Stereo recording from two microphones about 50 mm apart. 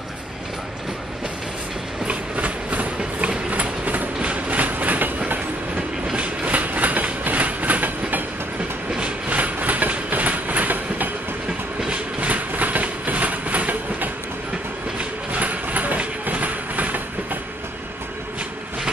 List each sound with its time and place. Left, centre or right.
2.0 s train: right
6.0 s train: right